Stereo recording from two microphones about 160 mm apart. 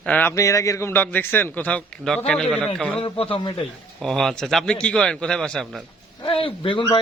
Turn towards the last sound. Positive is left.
turn(degrees=35)  # may be behind; listen again after turning